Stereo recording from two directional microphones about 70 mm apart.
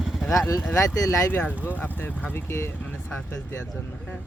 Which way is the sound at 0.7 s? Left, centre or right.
Left.